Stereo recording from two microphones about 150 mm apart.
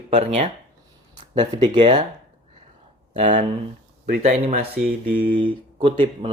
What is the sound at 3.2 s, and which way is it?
Speech, 55° right (ahead or behind).